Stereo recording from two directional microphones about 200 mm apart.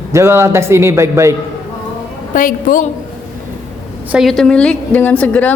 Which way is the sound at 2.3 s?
45° left (ahead or behind).